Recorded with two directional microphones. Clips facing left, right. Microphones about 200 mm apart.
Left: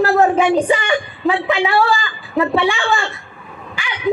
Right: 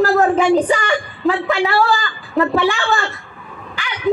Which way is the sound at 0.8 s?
15° left (ahead or behind).